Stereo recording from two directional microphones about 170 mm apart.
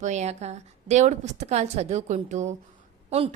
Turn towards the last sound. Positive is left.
turn(degrees=-35)  # may be behind; listen again after turning